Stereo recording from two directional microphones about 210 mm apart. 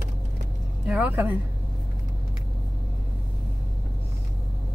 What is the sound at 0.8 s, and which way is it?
Speech, 5° right (ahead or behind).